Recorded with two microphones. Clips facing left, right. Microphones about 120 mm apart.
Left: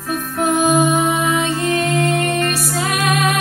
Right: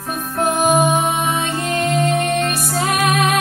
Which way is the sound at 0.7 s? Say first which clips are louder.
Left 1 dB; 15° right (ahead or behind).